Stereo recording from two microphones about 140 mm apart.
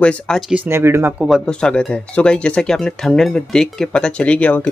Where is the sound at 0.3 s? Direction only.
5° left (ahead or behind).